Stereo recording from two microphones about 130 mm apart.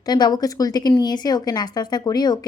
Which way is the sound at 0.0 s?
30° left (ahead or behind).